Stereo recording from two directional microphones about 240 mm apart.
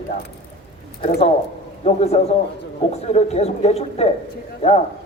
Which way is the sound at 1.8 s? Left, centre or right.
Left.